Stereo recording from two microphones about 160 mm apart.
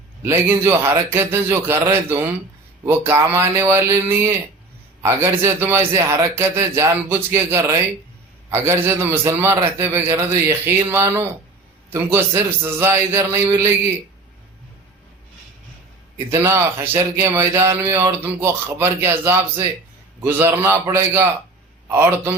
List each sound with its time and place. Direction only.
0.2 s speech: 15° right (ahead or behind)
16.3 s speech: 15° right (ahead or behind)